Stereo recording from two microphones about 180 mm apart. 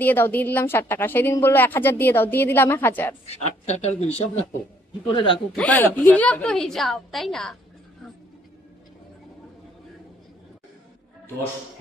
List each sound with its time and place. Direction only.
0.0 s speech: 10° left (ahead or behind)
3.3 s speech: 35° left (ahead or behind)
5.6 s a woman's voice: 10° left (ahead or behind)